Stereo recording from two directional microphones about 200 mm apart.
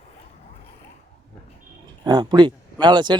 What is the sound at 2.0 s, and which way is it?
Speech, 20° right (ahead or behind).